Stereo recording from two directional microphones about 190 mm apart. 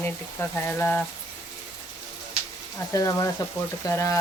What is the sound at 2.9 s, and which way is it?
Speech, 15° left (ahead or behind).